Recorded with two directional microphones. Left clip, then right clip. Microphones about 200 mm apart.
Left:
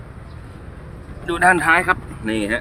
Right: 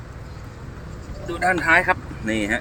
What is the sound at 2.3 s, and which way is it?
Speech, 5° left (ahead or behind).